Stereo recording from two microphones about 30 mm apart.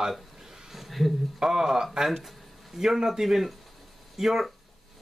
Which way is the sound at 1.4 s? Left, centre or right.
Centre.